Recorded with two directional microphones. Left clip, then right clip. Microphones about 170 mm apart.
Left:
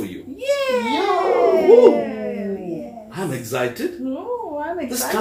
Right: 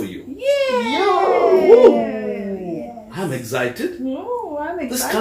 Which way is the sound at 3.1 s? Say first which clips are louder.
Right 1 dB; 10° right (ahead or behind).